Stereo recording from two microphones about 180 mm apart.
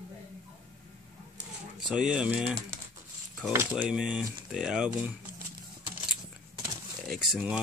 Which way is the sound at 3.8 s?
5° right (ahead or behind).